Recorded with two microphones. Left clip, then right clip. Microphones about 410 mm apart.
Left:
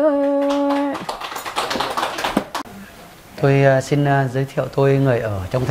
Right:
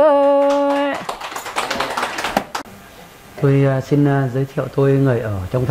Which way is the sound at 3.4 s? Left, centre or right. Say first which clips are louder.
Left 3 dB; left.